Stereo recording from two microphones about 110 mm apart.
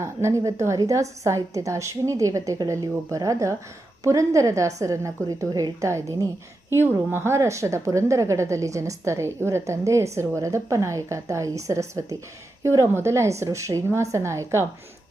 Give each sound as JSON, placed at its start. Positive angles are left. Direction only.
{"t": 0.0, "sound": "a woman's voice", "side_deg": -25}